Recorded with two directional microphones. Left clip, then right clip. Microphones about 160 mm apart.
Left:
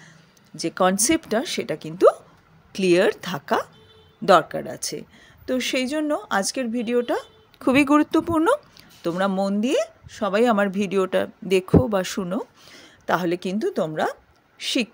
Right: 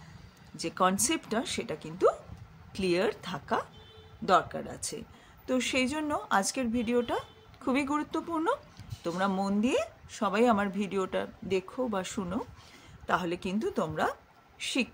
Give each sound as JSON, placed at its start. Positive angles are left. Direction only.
{"t": 0.6, "sound": "speech", "side_deg": 30}